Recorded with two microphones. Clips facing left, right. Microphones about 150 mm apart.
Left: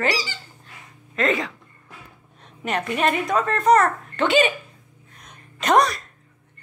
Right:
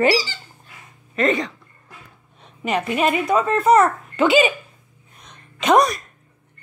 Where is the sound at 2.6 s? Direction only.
5° right (ahead or behind).